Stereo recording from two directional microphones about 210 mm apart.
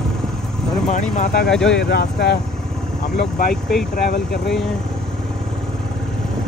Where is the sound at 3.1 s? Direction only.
40° left (ahead or behind).